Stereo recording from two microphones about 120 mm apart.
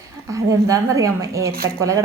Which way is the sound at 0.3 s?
25° right (ahead or behind).